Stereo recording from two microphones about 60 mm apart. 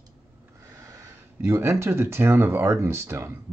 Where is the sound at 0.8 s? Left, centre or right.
Right.